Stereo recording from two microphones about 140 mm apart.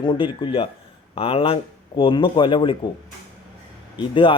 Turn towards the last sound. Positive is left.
turn(degrees=35)  # may be behind; listen again after turning